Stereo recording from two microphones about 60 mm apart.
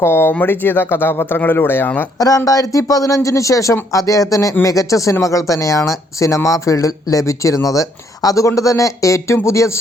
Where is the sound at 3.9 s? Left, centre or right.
Left.